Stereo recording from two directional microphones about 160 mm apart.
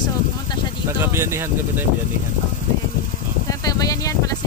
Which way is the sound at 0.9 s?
15° right (ahead or behind).